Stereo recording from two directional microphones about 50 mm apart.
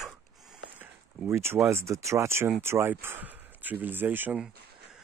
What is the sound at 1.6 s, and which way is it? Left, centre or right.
Speech, right.